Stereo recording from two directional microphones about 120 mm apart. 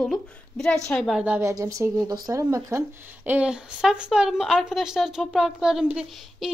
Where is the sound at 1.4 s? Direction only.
25° right (ahead or behind).